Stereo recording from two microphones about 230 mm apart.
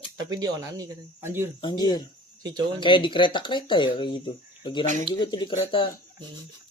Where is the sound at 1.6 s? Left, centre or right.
Centre.